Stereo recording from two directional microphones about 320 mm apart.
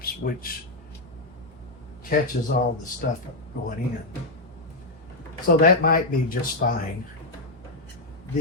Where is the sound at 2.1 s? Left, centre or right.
Left.